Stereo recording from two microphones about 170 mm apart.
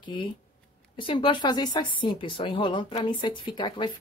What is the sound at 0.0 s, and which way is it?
Speech, 30° left (ahead or behind).